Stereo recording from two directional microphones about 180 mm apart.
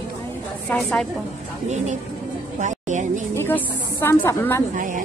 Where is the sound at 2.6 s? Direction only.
45° right (ahead or behind).